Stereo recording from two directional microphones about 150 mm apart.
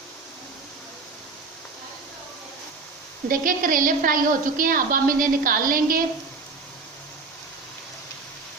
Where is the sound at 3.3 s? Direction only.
65° right (ahead or behind).